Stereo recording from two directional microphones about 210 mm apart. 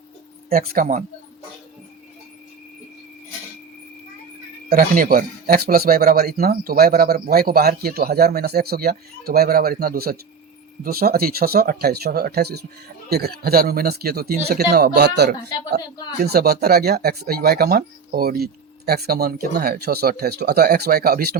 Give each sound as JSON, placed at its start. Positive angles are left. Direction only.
{"t": 0.5, "sound": "speech", "side_deg": -45}
{"t": 4.7, "sound": "speech", "side_deg": -45}